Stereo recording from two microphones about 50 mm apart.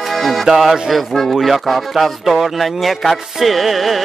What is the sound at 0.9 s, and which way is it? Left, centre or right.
Speech, centre.